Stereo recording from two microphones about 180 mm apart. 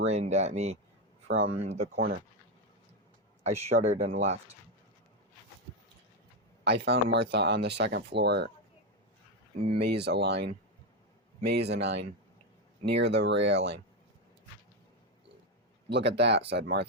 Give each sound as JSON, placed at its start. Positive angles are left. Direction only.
{"t": 0.1, "sound": "speech", "side_deg": -40}
{"t": 2.0, "sound": "speech", "side_deg": -55}
{"t": 3.4, "sound": "speech", "side_deg": -35}
{"t": 6.7, "sound": "speech", "side_deg": -70}
{"t": 9.7, "sound": "speech", "side_deg": -65}
{"t": 13.0, "sound": "speech", "side_deg": -75}
{"t": 15.9, "sound": "speech", "side_deg": -70}